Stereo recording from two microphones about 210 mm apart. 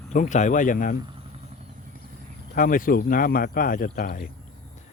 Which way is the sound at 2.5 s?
40° left (ahead or behind).